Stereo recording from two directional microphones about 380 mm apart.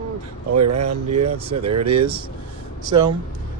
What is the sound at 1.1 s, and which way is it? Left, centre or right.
Speech, centre.